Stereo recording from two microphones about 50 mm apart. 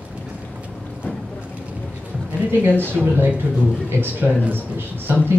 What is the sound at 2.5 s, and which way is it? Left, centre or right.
A woman's voice, right.